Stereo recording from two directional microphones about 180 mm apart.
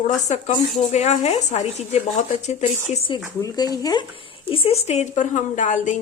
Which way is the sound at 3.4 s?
20° left (ahead or behind).